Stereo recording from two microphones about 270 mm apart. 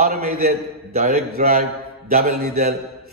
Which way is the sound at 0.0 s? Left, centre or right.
Right.